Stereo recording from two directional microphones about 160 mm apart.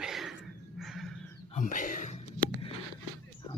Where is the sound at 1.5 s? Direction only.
50° left (ahead or behind).